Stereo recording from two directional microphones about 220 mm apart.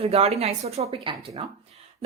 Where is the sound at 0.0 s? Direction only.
25° right (ahead or behind).